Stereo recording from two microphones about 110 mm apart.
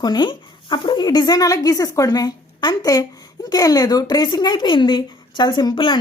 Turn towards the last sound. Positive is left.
turn(degrees=50)  # may be behind; listen again after turning